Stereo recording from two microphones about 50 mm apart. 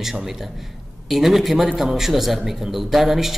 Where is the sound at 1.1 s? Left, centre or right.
Centre.